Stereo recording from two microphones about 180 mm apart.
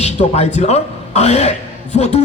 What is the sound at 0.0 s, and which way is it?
A man's voice, 40° left (ahead or behind).